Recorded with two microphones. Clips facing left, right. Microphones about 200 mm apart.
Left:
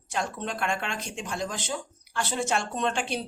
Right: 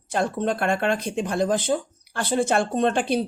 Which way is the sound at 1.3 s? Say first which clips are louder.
Right 10 dB; 55° right (ahead or behind).